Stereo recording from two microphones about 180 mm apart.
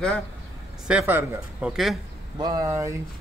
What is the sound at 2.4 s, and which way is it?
Speech, 20° right (ahead or behind).